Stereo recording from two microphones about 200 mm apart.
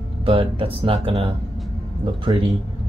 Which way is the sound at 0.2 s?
25° right (ahead or behind).